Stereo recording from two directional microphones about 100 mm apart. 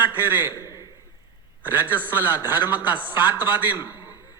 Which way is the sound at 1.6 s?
20° right (ahead or behind).